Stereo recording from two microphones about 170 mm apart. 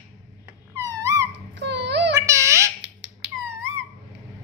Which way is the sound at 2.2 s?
15° right (ahead or behind).